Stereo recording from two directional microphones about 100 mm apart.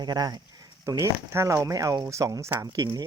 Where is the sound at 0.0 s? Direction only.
40° right (ahead or behind).